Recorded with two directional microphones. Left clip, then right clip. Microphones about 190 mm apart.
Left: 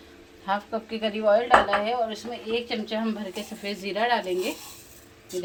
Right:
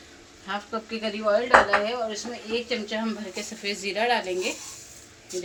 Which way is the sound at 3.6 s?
50° left (ahead or behind).